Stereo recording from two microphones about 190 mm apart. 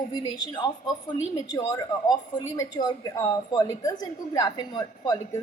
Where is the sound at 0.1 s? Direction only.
25° left (ahead or behind).